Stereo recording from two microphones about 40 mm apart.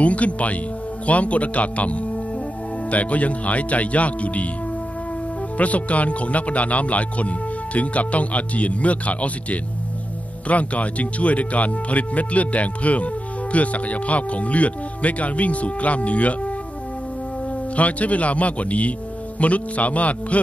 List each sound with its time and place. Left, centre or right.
0.0 s speech: left
5.6 s speech: left
17.7 s speech: left